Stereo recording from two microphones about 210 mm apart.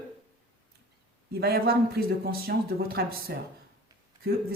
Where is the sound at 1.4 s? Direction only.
50° right (ahead or behind).